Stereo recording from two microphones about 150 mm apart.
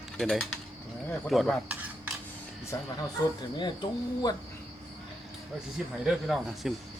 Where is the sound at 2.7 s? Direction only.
20° left (ahead or behind).